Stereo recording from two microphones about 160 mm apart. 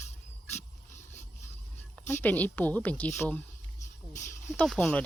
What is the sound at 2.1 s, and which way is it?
Speech, 10° left (ahead or behind).